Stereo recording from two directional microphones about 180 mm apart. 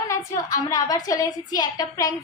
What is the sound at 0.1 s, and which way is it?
A woman's voice, 20° left (ahead or behind).